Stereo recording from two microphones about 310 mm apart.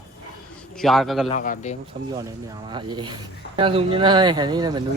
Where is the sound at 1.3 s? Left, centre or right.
Left.